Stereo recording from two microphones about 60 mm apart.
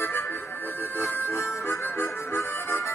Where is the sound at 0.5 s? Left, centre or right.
Left.